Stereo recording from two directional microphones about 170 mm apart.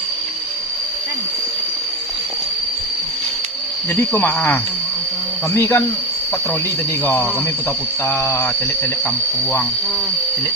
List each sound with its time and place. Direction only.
4.1 s speech: 10° left (ahead or behind)
7.0 s speech: 10° left (ahead or behind)